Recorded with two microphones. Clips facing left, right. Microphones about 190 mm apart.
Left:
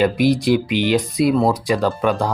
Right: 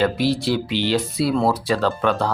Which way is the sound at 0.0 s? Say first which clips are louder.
Left 4 dB; 15° left (ahead or behind).